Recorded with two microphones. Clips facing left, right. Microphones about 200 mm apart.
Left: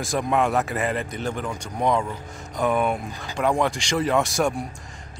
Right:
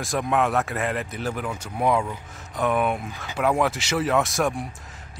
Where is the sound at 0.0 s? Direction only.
Centre (ahead or behind).